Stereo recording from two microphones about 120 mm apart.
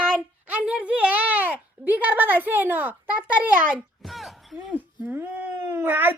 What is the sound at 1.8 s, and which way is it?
Speech, 15° right (ahead or behind).